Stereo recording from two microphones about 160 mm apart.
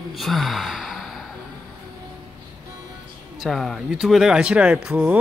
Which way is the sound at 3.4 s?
Centre (ahead or behind).